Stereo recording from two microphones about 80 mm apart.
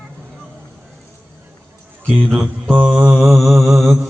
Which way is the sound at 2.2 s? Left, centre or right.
Centre.